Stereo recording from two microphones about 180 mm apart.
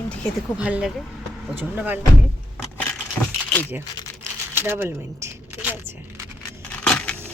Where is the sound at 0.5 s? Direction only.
5° right (ahead or behind).